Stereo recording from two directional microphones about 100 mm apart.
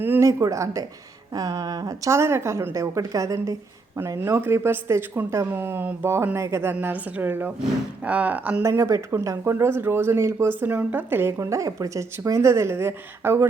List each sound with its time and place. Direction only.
0.0 s a sound: 20° right (ahead or behind)
0.3 s a woman's voice: 30° right (ahead or behind)
4.2 s a woman's voice: 25° right (ahead or behind)
8.6 s a woman's voice: 30° right (ahead or behind)
10.6 s a woman's voice: 15° right (ahead or behind)